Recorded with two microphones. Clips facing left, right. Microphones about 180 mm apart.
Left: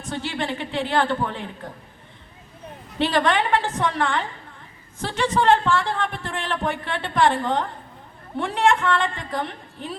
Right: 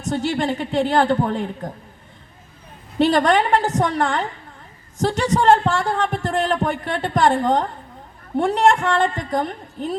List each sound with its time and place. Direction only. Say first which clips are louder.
0.0 s speech: right 6 dB; 40° right (ahead or behind)
3.0 s a woman's voice: right 5 dB; 40° right (ahead or behind)